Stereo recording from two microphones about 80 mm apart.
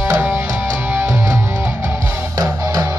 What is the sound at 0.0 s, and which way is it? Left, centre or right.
Music, right.